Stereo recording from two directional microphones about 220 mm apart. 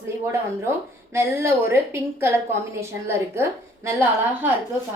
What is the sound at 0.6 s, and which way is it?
A woman's voice, 10° right (ahead or behind).